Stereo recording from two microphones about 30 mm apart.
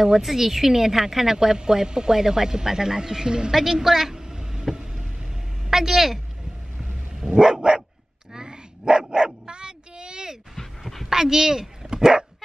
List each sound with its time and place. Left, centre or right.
0.0 s a woman's voice: centre; by 3.5 s right
3.5 s a woman's voice: centre
4.1 s vehicle: right
5.7 s speech: centre
7.3 s dog: right
11.1 s a sound: centre
11.9 s speech: right